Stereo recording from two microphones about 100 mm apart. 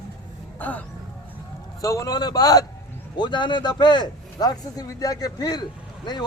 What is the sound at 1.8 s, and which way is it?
Speech, 35° left (ahead or behind).